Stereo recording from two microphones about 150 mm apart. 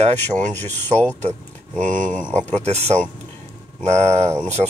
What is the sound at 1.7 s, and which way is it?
Speech, 60° right (ahead or behind).